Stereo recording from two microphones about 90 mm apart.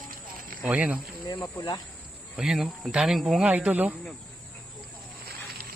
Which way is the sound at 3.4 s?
15° right (ahead or behind).